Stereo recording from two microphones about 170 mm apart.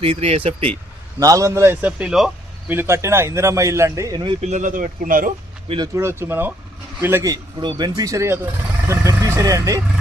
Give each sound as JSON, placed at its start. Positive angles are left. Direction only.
{"t": 0.0, "sound": "speech", "side_deg": -35}
{"t": 1.2, "sound": "speech", "side_deg": -20}
{"t": 2.7, "sound": "speech", "side_deg": -15}
{"t": 4.4, "sound": "speech", "side_deg": -45}
{"t": 5.6, "sound": "speech", "side_deg": -30}
{"t": 6.0, "sound": "speech", "side_deg": -15}